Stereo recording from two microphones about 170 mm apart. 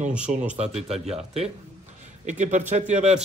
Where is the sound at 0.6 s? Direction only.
40° right (ahead or behind).